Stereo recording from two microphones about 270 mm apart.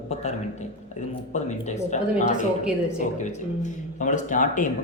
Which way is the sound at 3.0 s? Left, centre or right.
Left.